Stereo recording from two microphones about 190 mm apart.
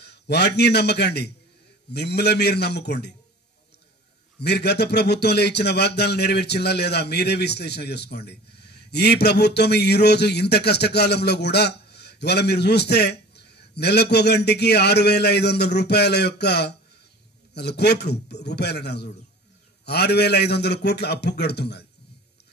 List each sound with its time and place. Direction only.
0.0 s a man's voice: 60° left (ahead or behind)
4.4 s speech: 60° left (ahead or behind)